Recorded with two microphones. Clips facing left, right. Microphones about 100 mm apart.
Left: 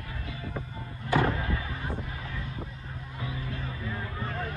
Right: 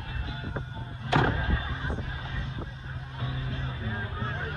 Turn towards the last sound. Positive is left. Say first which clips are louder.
# even
turn(degrees=-25)  # may be behind; listen again after turning